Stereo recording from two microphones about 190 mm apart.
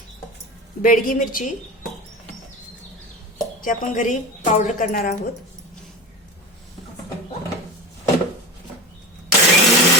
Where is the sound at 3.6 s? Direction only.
45° left (ahead or behind).